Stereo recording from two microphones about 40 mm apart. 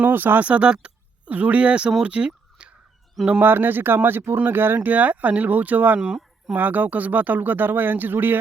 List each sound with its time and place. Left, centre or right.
0.0 s speech: right
0.3 s speech: right
0.7 s a sound: right
1.3 s speech: right
2.0 s fowl: right
3.4 s speech: right
4.8 s speech: right